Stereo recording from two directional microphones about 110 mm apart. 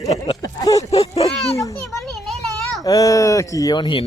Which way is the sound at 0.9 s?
65° left (ahead or behind).